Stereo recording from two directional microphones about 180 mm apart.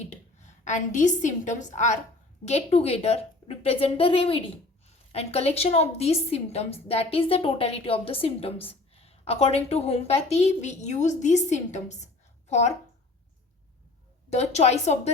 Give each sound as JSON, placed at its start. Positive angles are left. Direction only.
{"t": 0.6, "sound": "a woman's voice", "side_deg": 40}
{"t": 14.3, "sound": "a woman's voice", "side_deg": 35}